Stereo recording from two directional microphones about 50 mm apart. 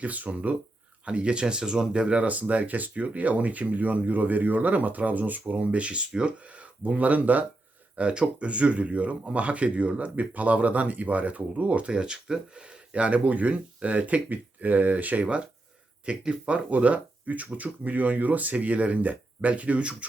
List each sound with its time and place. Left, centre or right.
0.0 s speech: right
11.9 s speech: centre